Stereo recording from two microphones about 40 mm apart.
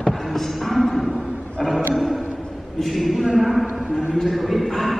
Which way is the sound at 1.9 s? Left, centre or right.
Centre.